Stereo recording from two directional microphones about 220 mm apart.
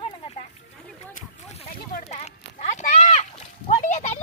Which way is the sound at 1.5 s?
35° left (ahead or behind).